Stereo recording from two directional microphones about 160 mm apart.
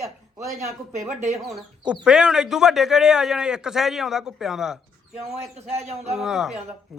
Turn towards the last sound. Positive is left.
turn(degrees=-5)  # may be behind; listen again after turning